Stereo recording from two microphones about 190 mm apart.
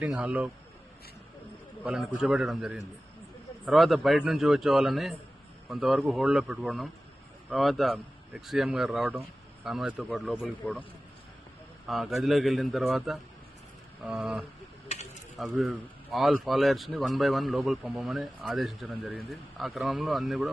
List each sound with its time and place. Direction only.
0.0 s a man's voice: 5° right (ahead or behind)
1.8 s a man's voice: 5° right (ahead or behind)
10.6 s speech: 10° left (ahead or behind)
11.9 s a man's voice: centre (ahead or behind)
14.9 s a sound: 35° left (ahead or behind)
15.4 s a man's voice: centre (ahead or behind)